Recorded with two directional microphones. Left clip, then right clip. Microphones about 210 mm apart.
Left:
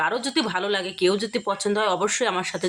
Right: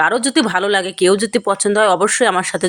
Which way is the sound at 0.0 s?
35° right (ahead or behind).